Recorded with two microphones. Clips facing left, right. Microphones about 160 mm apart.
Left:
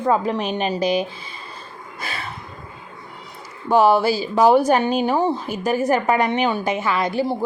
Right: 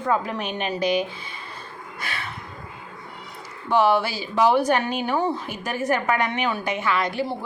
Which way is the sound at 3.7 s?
40° left (ahead or behind).